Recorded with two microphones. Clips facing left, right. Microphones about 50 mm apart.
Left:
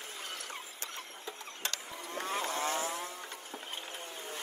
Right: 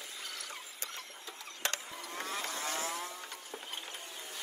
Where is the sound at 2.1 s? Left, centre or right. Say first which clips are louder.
Left 4 dB; left.